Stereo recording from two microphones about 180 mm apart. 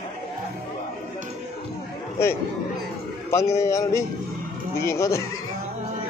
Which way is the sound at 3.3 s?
15° left (ahead or behind).